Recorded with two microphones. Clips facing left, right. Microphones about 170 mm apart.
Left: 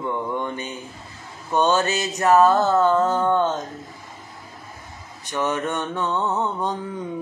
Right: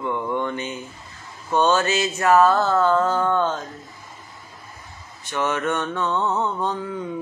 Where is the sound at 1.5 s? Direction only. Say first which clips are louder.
Right 1 dB; 15° left (ahead or behind).